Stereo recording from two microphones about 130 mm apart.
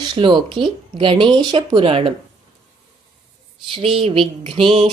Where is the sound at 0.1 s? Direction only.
35° right (ahead or behind).